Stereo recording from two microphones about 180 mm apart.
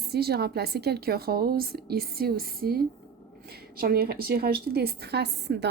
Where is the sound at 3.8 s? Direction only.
60° right (ahead or behind).